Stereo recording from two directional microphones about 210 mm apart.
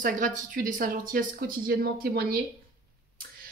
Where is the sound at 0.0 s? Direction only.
40° right (ahead or behind).